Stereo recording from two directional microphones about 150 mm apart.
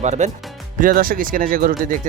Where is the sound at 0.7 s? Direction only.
70° right (ahead or behind).